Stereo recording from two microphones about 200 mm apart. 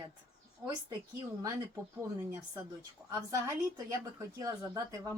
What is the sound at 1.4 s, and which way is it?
Speech, 15° right (ahead or behind).